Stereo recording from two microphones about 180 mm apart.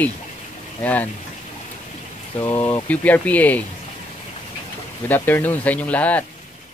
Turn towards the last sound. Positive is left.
turn(degrees=10)  # may be behind; listen again after turning